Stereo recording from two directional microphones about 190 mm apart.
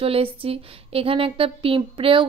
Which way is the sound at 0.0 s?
30° right (ahead or behind).